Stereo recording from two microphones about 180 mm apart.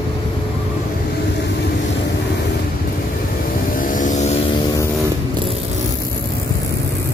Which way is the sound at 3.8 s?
45° left (ahead or behind).